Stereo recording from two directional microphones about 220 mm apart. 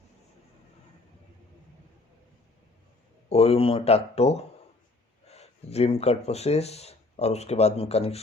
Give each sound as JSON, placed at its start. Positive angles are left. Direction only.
{"t": 3.2, "sound": "speech", "side_deg": 30}